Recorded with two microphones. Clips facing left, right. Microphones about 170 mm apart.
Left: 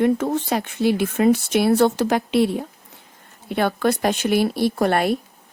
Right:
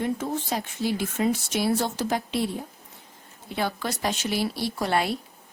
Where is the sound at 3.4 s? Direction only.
60° left (ahead or behind).